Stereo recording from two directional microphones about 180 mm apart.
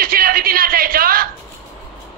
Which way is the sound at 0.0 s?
55° right (ahead or behind).